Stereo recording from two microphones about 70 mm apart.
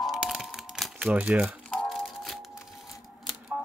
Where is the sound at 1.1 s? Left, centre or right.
Right.